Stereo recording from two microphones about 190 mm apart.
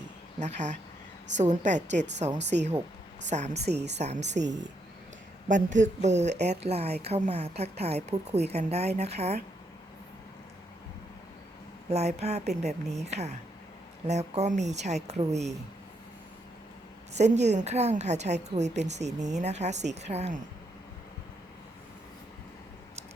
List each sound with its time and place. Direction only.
0.3 s a woman's voice: 35° right (ahead or behind)
2.4 s speech: 65° right (ahead or behind)
3.2 s a woman's voice: 35° right (ahead or behind)
3.7 s speech: 60° right (ahead or behind)
3.9 s a woman's voice: 35° right (ahead or behind)
5.5 s a woman's voice: 40° right (ahead or behind)
11.9 s a woman's voice: 35° right (ahead or behind)
17.2 s a woman's voice: 35° right (ahead or behind)